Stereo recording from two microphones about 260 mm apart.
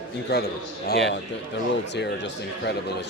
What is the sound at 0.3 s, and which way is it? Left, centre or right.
Speech, left.